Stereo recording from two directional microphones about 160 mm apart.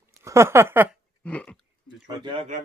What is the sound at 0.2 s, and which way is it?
Speech, 15° right (ahead or behind).